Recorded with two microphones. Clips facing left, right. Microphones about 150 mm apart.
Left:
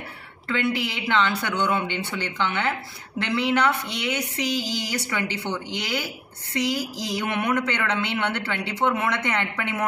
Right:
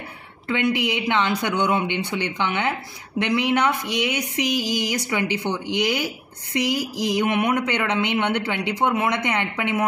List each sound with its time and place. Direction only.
0.5 s speech: 15° right (ahead or behind)